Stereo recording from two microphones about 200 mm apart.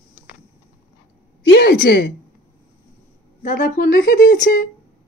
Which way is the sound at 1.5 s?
60° left (ahead or behind).